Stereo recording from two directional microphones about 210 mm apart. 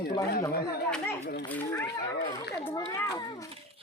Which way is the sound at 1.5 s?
10° left (ahead or behind).